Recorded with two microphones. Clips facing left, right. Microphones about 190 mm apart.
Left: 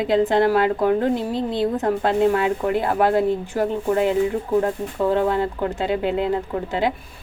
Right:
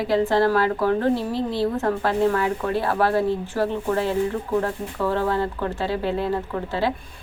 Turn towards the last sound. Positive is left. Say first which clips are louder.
# left 3 dB
turn(degrees=20)  # may be behind; listen again after turning